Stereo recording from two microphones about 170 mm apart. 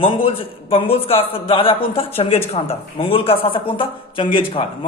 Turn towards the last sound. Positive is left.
turn(degrees=30)  # may be behind; listen again after turning